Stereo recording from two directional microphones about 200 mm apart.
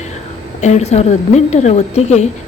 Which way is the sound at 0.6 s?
35° left (ahead or behind).